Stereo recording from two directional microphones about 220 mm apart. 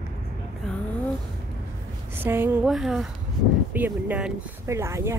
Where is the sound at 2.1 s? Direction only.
10° right (ahead or behind).